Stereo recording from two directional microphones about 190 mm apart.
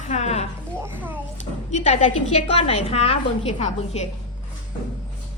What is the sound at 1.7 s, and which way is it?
A woman's voice, 35° left (ahead or behind).